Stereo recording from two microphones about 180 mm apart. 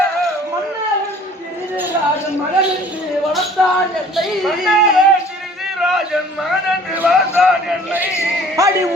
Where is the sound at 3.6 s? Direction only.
5° left (ahead or behind).